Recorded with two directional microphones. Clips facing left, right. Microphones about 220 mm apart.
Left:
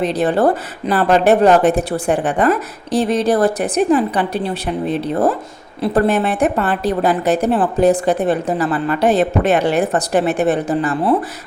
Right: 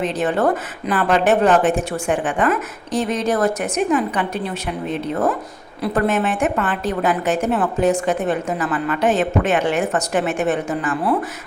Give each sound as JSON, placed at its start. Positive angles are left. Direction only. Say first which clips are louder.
{"t": 0.0, "sound": "speech", "louder": "left 4 dB", "side_deg": 35}